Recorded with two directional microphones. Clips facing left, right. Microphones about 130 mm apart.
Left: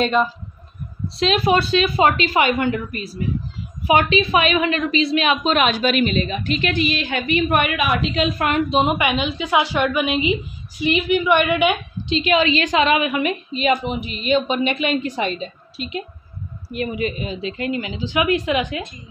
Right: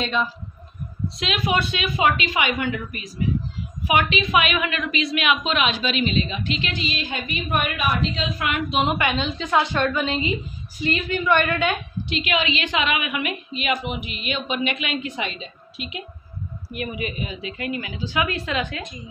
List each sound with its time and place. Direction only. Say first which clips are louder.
0.0 s a woman's voice: left 6 dB; 50° left (ahead or behind)
1.0 s a woman's voice: left 7 dB; 35° left (ahead or behind)
3.8 s a woman's voice: left 5 dB; 30° left (ahead or behind); by 8.3 s 75° left (ahead or behind)
8.4 s a woman's voice: left 4 dB; 35° left (ahead or behind)
8.6 s a woman's voice: left 3 dB; 20° left (ahead or behind)
12.2 s a woman's voice: left 7 dB; 35° left (ahead or behind); by 18.9 s 20° left (ahead or behind)